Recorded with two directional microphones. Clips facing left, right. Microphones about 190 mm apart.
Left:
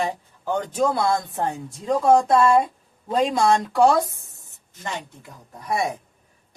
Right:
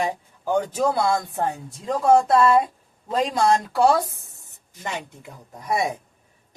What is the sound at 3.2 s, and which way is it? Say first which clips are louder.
Speech: left 1 dB; centre (ahead or behind).